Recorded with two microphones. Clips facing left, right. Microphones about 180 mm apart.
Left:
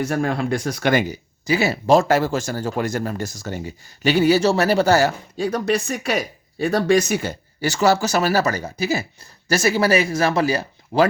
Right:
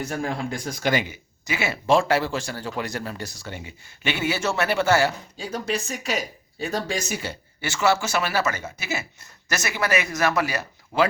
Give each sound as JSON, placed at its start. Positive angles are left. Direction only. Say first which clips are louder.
{"t": 0.1, "sound": "speech", "louder": "left 6 dB", "side_deg": 70}
{"t": 1.0, "sound": "speech", "louder": "left 9 dB", "side_deg": 35}
{"t": 5.4, "sound": "speech", "louder": "left 7 dB", "side_deg": 65}